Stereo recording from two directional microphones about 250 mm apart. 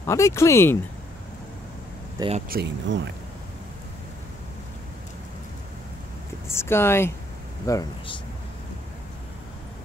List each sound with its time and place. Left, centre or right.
0.0 s speech: centre
2.1 s speech: right
2.5 s speech: right
6.5 s speech: centre